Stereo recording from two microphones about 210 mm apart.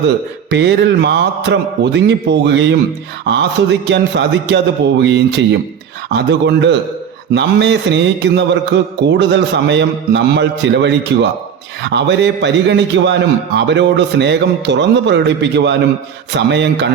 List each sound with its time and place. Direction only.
0.5 s a man's voice: 55° right (ahead or behind)